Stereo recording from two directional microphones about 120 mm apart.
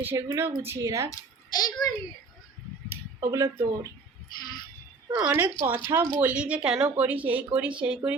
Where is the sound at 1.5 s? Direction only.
35° left (ahead or behind).